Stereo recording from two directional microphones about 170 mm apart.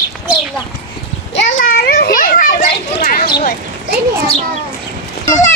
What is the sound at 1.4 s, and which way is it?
Children playing, 60° left (ahead or behind).